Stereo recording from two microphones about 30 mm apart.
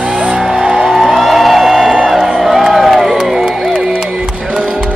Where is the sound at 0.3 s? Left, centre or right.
Right.